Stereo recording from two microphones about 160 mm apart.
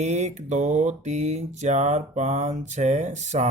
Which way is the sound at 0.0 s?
45° right (ahead or behind).